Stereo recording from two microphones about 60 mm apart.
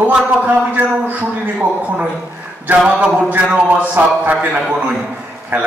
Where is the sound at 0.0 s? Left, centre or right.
Right.